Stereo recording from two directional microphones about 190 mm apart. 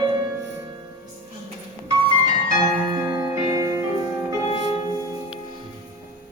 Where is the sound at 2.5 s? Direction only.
20° right (ahead or behind).